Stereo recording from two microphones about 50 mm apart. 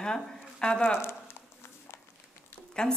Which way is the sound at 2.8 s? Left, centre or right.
Centre.